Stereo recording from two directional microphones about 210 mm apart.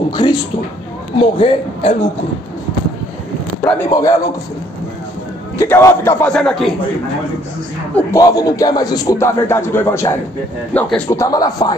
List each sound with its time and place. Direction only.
0.1 s a man's voice: 20° left (ahead or behind)
3.9 s speech: 15° left (ahead or behind)
5.6 s speech: 15° left (ahead or behind)
7.9 s speech: 15° left (ahead or behind)